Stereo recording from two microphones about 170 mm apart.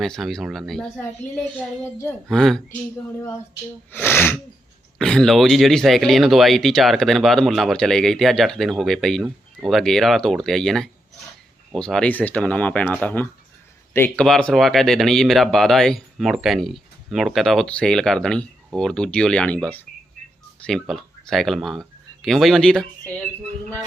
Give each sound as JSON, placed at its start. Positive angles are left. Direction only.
{"t": 0.0, "sound": "speech", "side_deg": 0}
{"t": 2.3, "sound": "speech", "side_deg": 0}
{"t": 3.2, "sound": "speech", "side_deg": 15}